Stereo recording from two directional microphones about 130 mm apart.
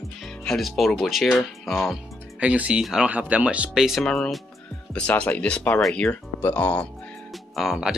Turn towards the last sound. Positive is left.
turn(degrees=-5)  # may be behind; listen again after turning